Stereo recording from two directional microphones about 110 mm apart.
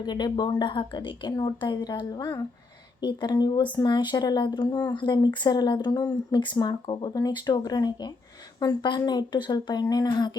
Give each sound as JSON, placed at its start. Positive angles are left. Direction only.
{"t": 0.0, "sound": "a woman's voice", "side_deg": 40}